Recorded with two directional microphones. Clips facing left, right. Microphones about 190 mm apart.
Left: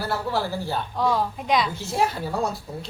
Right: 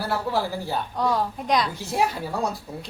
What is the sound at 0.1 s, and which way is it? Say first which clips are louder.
Speech: right 1 dB; 10° right (ahead or behind).